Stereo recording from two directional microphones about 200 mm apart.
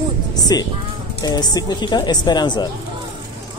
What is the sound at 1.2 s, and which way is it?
Speech, 20° left (ahead or behind).